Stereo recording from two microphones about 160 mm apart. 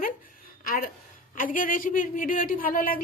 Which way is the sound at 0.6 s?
60° left (ahead or behind).